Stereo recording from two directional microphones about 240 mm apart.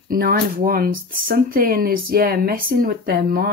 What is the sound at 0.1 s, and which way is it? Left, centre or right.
Speech, right.